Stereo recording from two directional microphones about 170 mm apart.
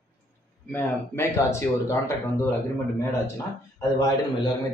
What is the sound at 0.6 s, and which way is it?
A man's voice, 10° left (ahead or behind).